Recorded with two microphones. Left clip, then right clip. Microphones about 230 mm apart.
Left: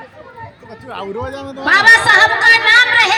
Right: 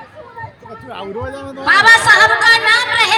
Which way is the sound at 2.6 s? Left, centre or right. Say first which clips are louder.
Left 3 dB; right.